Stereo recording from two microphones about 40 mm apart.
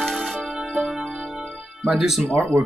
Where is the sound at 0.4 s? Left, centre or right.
Centre.